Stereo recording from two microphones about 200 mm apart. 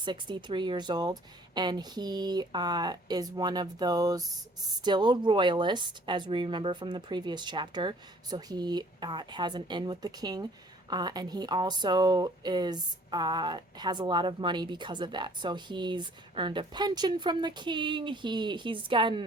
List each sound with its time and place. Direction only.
0.0 s speech: 25° right (ahead or behind)